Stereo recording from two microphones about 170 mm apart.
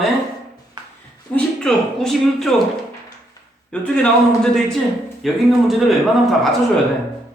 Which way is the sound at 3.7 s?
5° left (ahead or behind).